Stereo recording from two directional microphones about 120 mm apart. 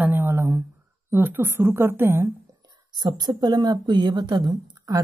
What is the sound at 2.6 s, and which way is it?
Speech, 35° right (ahead or behind).